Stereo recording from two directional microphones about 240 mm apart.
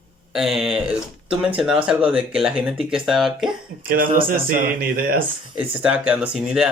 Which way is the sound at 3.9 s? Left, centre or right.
Right.